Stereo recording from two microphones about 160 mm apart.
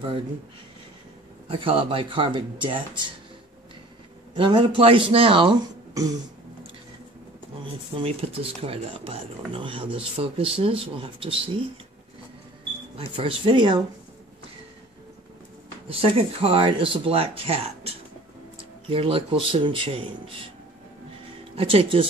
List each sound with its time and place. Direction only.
1.5 s speech: 35° right (ahead or behind)
4.4 s speech: 30° right (ahead or behind)
7.9 s speech: 35° right (ahead or behind)
12.9 s speech: 35° right (ahead or behind)
15.9 s speech: 35° right (ahead or behind)
21.5 s speech: 35° right (ahead or behind)